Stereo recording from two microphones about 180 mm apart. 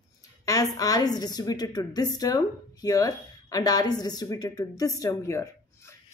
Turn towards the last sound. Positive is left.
turn(degrees=15)  # may be behind; listen again after turning